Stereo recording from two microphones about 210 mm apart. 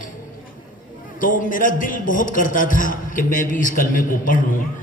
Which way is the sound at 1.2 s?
40° left (ahead or behind).